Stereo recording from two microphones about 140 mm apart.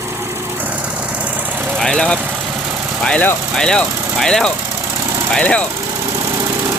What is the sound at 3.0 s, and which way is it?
Speech, 10° left (ahead or behind).